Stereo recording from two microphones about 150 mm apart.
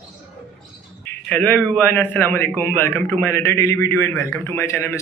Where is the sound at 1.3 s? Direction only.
10° left (ahead or behind).